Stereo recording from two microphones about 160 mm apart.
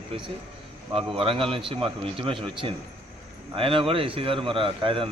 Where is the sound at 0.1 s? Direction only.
35° right (ahead or behind).